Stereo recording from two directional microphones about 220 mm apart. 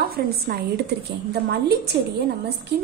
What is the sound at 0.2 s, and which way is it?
Speech, 45° right (ahead or behind).